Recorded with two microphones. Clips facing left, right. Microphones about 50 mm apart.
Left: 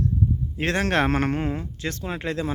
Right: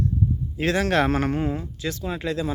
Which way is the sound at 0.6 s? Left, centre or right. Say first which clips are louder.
Right 1 dB; left.